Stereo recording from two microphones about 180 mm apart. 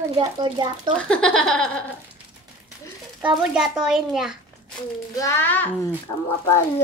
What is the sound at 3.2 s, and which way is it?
A child's voice, 5° right (ahead or behind).